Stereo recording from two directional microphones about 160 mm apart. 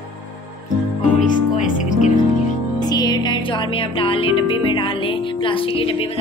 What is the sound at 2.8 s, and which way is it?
Music, 25° left (ahead or behind).